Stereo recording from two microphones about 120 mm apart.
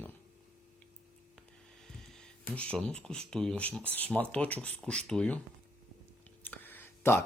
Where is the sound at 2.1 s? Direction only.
10° left (ahead or behind).